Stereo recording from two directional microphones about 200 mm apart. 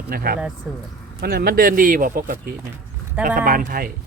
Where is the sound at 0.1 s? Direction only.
50° right (ahead or behind).